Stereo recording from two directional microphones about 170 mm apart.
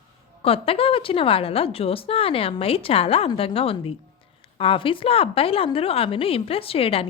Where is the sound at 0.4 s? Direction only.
35° left (ahead or behind).